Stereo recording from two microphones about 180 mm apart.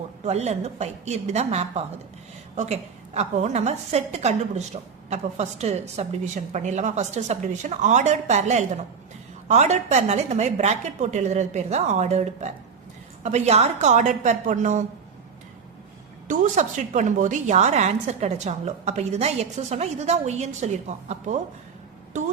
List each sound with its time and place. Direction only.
0.3 s a woman's voice: 40° right (ahead or behind)
3.2 s a woman's voice: 40° right (ahead or behind)
16.2 s a woman's voice: 45° right (ahead or behind)